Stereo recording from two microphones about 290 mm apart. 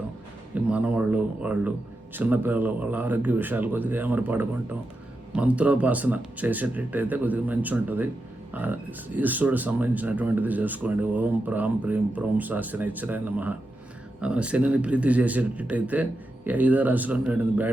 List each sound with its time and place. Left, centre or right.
0.7 s speech: centre